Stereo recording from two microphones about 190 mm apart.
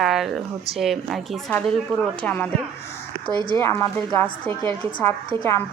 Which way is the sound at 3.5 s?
15° left (ahead or behind).